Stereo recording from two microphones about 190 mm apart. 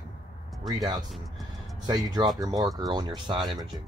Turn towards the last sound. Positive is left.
turn(degrees=-20)  # may be behind; listen again after turning